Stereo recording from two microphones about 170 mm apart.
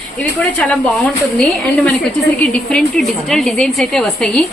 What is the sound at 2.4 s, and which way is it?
A woman's voice, 5° left (ahead or behind).